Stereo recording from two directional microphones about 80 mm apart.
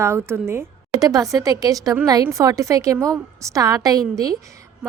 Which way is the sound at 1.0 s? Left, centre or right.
Right.